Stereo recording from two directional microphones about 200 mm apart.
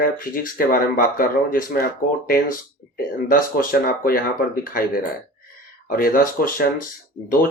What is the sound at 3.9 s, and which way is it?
Speech, 45° left (ahead or behind).